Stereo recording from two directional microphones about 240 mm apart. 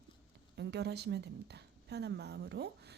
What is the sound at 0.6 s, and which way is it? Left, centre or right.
A woman's voice, right.